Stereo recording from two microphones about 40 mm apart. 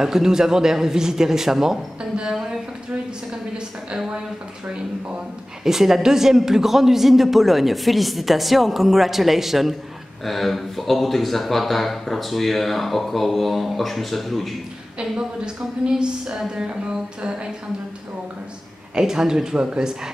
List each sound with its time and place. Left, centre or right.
0.0 s a man's voice: centre
5.6 s speech: centre
15.0 s a woman's voice: right
18.9 s a man's voice: centre